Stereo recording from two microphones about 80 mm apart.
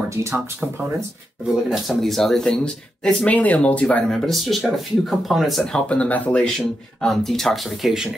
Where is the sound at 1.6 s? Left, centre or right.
Centre.